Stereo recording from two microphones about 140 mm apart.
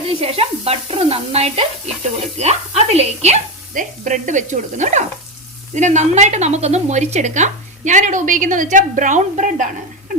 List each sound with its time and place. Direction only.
0.2 s speech: 45° right (ahead or behind)
3.8 s a woman's voice: 60° right (ahead or behind)